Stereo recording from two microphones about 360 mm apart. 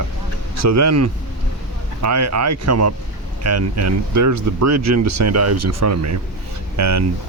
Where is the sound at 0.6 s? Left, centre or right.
Right.